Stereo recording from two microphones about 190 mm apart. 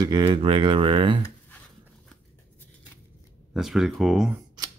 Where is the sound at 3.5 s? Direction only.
Centre (ahead or behind).